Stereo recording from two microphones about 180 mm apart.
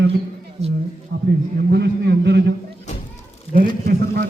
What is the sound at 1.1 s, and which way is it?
A man's voice, 75° right (ahead or behind).